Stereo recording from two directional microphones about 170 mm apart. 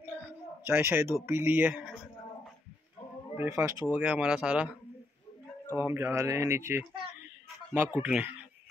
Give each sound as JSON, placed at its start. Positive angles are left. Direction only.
{"t": 0.7, "sound": "speech", "side_deg": -15}
{"t": 3.3, "sound": "speech", "side_deg": -15}
{"t": 5.8, "sound": "speech", "side_deg": -15}